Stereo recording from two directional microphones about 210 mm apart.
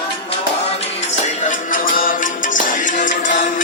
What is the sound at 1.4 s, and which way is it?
Music, 40° left (ahead or behind).